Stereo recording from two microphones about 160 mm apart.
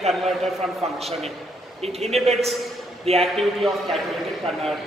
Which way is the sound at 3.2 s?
Centre (ahead or behind).